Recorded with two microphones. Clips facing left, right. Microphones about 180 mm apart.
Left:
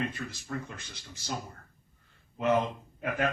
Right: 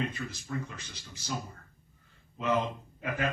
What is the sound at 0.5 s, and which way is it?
Speech, 50° left (ahead or behind).